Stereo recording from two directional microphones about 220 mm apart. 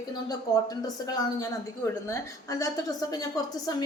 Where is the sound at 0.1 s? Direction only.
15° left (ahead or behind).